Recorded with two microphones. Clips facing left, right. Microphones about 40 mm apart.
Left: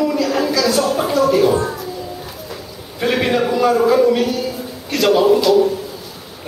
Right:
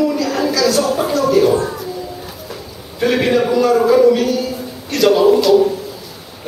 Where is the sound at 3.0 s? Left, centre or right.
Centre.